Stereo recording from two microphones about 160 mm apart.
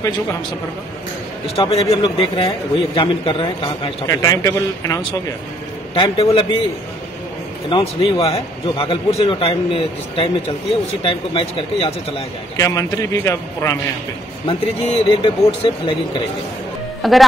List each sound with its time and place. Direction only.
1.6 s a man's voice: 35° left (ahead or behind)
5.9 s a man's voice: 35° left (ahead or behind)
7.7 s a man's voice: 35° left (ahead or behind)
12.5 s speech: 20° left (ahead or behind)
14.4 s a man's voice: 35° left (ahead or behind)
17.0 s speech: centre (ahead or behind)